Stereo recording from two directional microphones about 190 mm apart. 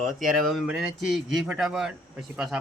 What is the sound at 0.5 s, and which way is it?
Speech, centre (ahead or behind).